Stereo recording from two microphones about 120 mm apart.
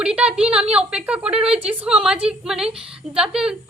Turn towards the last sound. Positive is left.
turn(degrees=-5)  # may be behind; listen again after turning